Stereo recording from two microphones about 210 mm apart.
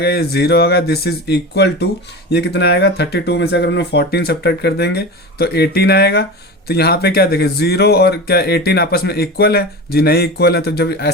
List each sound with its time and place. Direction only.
0.0 s speech: 50° left (ahead or behind)